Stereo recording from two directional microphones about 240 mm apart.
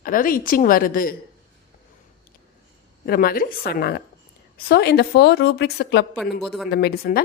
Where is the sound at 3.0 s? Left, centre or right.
Left.